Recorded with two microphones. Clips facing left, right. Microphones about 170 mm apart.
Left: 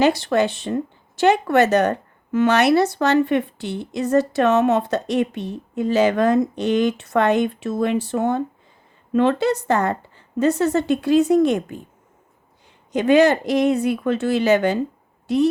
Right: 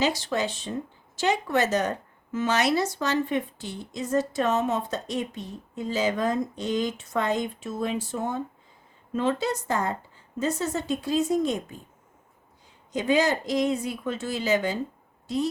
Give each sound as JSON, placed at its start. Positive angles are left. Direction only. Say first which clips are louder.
{"t": 0.0, "sound": "speech", "louder": "left 8 dB", "side_deg": 60}
{"t": 12.9, "sound": "speech", "louder": "left 8 dB", "side_deg": 65}